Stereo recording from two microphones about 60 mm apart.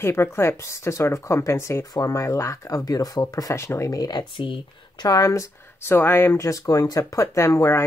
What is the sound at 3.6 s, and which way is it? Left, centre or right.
Speech, left.